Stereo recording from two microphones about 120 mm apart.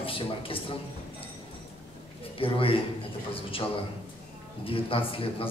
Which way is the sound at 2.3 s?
50° left (ahead or behind).